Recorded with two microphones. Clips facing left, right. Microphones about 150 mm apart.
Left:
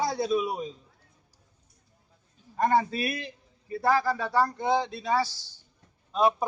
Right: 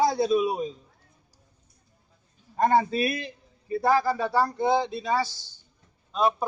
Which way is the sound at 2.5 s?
25° right (ahead or behind).